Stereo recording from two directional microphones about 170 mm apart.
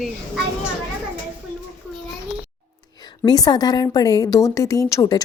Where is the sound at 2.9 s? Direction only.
25° left (ahead or behind).